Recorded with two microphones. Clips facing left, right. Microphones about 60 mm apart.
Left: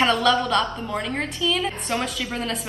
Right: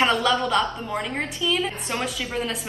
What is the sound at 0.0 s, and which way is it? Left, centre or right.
Speech, centre.